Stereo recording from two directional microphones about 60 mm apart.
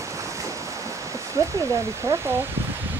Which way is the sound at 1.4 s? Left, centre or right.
Right.